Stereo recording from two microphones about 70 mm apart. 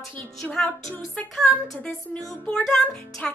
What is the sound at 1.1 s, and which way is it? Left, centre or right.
Female singing, centre.